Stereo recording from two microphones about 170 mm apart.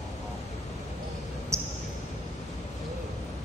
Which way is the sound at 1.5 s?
15° right (ahead or behind).